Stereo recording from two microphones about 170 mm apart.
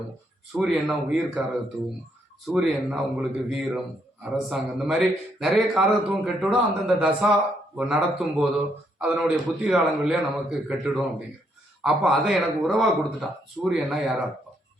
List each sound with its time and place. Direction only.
0.5 s a man's voice: 5° right (ahead or behind)
2.6 s a man's voice: centre (ahead or behind)